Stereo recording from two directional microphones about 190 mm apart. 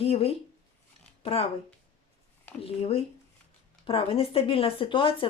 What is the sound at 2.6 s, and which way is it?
Speech, 30° left (ahead or behind).